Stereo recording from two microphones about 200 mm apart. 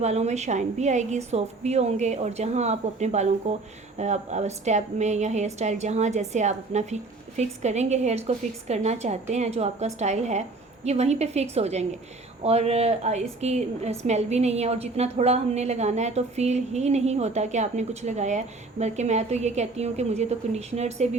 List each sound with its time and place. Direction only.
0.0 s a woman's voice: 35° right (ahead or behind)